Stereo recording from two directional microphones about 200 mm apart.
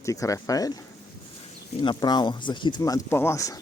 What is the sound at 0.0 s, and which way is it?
Speech, 15° left (ahead or behind).